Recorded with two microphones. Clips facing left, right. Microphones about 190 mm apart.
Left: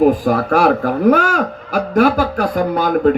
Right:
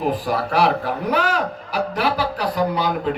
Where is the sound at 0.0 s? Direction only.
45° left (ahead or behind).